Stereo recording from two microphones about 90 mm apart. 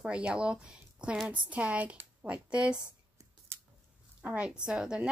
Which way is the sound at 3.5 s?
25° right (ahead or behind).